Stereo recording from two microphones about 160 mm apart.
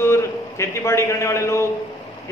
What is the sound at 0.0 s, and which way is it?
A man's voice, 15° left (ahead or behind).